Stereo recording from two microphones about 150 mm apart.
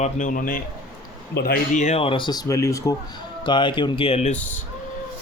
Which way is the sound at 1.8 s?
45° left (ahead or behind).